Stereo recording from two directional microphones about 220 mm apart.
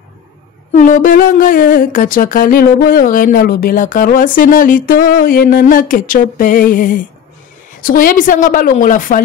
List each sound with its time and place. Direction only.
0.7 s speech: 40° left (ahead or behind)